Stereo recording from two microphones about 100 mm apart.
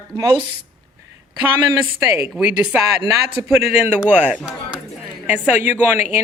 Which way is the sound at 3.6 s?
20° right (ahead or behind).